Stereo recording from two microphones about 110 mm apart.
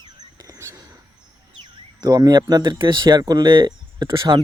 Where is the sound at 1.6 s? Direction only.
40° right (ahead or behind).